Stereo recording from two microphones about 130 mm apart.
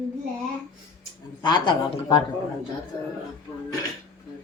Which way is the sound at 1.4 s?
35° left (ahead or behind).